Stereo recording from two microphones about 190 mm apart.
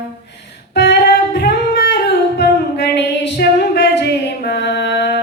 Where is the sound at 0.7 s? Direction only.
60° left (ahead or behind).